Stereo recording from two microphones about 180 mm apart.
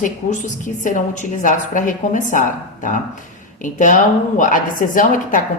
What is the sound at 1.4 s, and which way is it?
Speech, 45° left (ahead or behind).